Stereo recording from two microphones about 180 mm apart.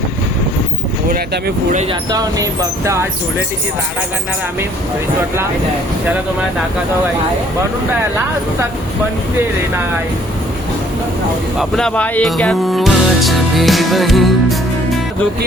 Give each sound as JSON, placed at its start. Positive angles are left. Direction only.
{"t": 1.1, "sound": "speech", "side_deg": -60}
{"t": 1.9, "sound": "speech", "side_deg": -20}
{"t": 11.5, "sound": "speech", "side_deg": 5}